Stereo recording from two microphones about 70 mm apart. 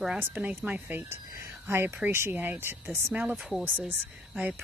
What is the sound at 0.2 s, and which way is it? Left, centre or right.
A woman's voice, right.